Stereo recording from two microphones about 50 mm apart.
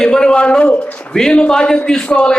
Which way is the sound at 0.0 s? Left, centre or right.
Centre.